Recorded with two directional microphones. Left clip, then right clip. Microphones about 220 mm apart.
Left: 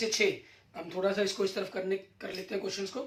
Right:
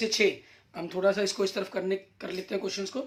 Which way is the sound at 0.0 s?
45° right (ahead or behind).